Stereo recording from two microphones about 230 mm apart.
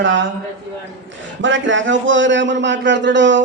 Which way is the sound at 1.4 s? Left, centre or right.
Right.